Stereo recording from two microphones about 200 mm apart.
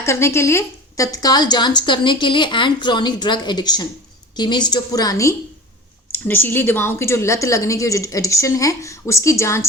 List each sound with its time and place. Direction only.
0.0 s a woman's voice: 15° left (ahead or behind)